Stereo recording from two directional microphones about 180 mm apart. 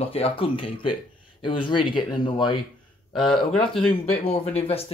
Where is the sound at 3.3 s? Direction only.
5° left (ahead or behind).